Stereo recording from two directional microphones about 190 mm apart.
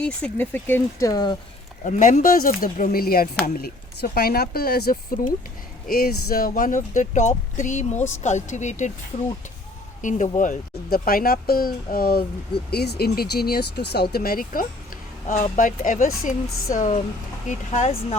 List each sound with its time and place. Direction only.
0.0 s speech: 10° left (ahead or behind)
1.8 s speech: 40° left (ahead or behind)
10.0 s speech: 40° left (ahead or behind)